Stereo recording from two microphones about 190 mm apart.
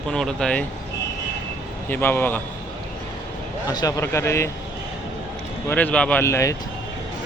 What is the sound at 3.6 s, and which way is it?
Speech, 20° left (ahead or behind).